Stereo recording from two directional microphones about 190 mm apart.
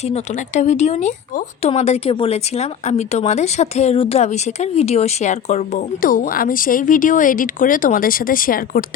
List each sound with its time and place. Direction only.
0.0 s speech: 35° left (ahead or behind)